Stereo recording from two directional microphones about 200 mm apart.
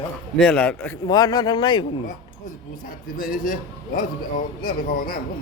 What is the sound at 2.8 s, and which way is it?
A man's voice, 45° left (ahead or behind).